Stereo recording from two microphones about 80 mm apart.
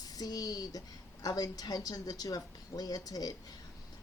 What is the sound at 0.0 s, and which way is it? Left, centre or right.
A woman's voice, left.